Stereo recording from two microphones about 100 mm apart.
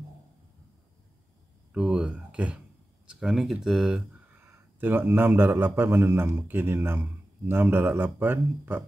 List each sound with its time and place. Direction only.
1.7 s speech: 5° right (ahead or behind)
4.5 s a man's voice: 20° right (ahead or behind)